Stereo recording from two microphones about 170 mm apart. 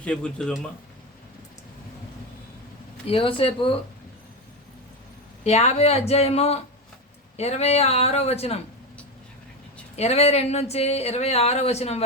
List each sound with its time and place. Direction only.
0.0 s speech: 5° left (ahead or behind)
3.1 s speech: 30° left (ahead or behind)
5.4 s speech: 40° left (ahead or behind)
9.9 s speech: 40° left (ahead or behind)